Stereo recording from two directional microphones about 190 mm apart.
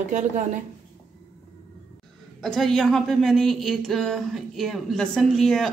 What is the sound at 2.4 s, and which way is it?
Speech, centre (ahead or behind).